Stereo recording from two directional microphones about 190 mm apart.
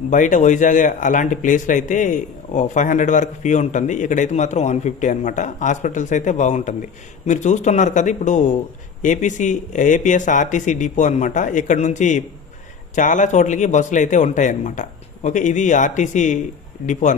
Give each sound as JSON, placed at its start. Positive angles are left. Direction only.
{"t": 0.1, "sound": "speech", "side_deg": 40}